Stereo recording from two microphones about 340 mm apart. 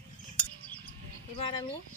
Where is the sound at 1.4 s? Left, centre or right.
Centre.